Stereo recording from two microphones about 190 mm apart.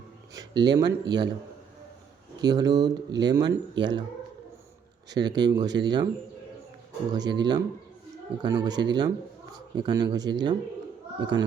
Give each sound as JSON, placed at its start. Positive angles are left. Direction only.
{"t": 0.3, "sound": "speech", "side_deg": -20}
{"t": 2.4, "sound": "speech", "side_deg": -20}
{"t": 5.1, "sound": "speech", "side_deg": -20}
{"t": 7.1, "sound": "speech", "side_deg": -20}